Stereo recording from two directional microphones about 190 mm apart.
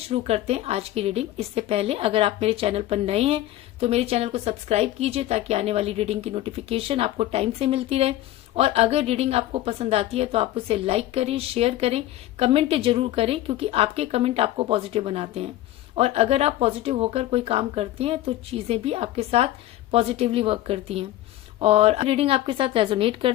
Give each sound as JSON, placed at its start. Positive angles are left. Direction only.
{"t": 0.1, "sound": "a woman's voice", "side_deg": -35}